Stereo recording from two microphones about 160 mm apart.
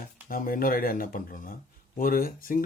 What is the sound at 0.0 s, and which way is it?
Speech, 60° left (ahead or behind).